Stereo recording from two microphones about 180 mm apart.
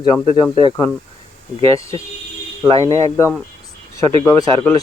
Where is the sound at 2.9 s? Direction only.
15° left (ahead or behind).